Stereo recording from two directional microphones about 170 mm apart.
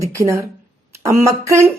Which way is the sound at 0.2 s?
15° right (ahead or behind).